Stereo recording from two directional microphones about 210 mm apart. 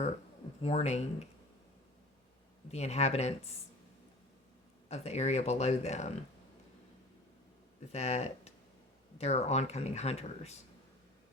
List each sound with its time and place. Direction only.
0.6 s speech: 30° left (ahead or behind)
2.7 s speech: 30° left (ahead or behind)
4.9 s speech: 30° left (ahead or behind)
7.9 s speech: 30° left (ahead or behind)